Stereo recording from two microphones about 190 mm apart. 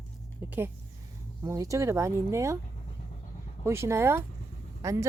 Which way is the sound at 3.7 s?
15° right (ahead or behind).